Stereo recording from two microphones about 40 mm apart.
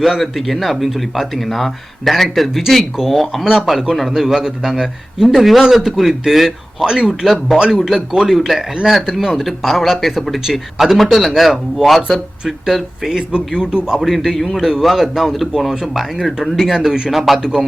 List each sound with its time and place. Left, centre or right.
0.0 s a man's voice: centre
9.2 s a man's voice: centre; by 13.9 s right
13.9 s speech: centre
14.6 s a man's voice: centre
16.7 s a man's voice: centre